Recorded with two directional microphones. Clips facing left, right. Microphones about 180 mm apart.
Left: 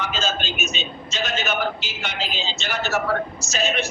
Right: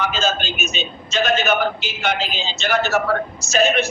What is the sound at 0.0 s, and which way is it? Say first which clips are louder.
A man's voice: right 4 dB; 55° right (ahead or behind).